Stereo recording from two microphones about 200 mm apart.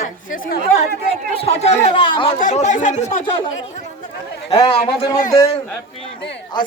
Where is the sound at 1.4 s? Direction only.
30° left (ahead or behind).